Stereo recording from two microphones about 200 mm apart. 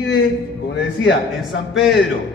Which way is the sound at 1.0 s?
60° left (ahead or behind).